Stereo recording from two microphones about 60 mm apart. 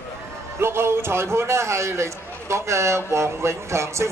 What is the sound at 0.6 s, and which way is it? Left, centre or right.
A man's voice, right.